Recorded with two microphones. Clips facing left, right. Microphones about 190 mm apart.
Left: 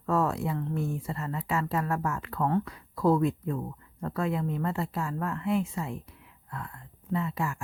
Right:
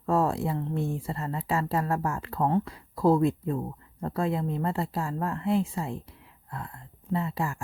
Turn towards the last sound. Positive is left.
turn(degrees=-35)  # may be behind; listen again after turning